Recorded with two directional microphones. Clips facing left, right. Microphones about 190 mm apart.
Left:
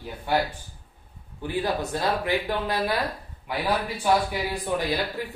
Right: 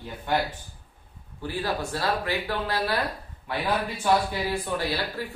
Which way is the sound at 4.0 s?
15° left (ahead or behind).